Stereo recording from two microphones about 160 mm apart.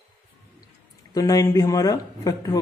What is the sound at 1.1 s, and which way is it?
A man's voice, 20° left (ahead or behind).